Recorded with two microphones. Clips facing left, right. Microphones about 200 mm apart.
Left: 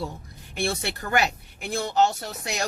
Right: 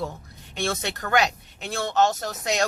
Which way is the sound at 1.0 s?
75° right (ahead or behind).